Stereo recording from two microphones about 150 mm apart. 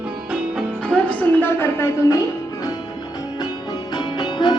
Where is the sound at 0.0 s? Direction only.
5° right (ahead or behind).